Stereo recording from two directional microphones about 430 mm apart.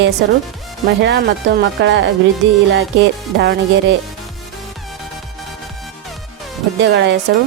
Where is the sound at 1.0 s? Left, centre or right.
Right.